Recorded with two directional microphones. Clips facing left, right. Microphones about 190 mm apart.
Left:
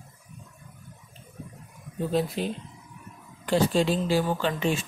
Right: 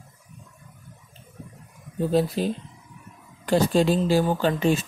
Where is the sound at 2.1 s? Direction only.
35° right (ahead or behind).